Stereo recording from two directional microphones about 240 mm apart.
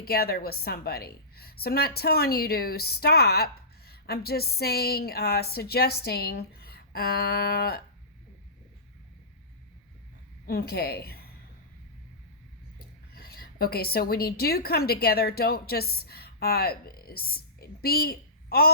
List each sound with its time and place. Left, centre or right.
0.0 s a woman's voice: left
10.4 s a woman's voice: left
13.1 s speech: left